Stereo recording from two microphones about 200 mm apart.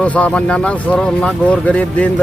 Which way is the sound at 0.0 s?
5° left (ahead or behind).